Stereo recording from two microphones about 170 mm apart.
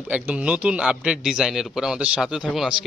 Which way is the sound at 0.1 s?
10° right (ahead or behind).